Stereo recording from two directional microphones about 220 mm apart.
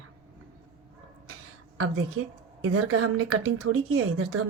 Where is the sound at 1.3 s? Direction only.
80° right.